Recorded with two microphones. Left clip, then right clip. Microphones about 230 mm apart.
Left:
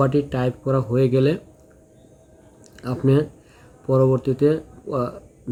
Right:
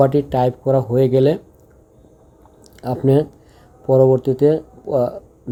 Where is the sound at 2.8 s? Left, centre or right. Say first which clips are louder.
Right 4 dB; centre.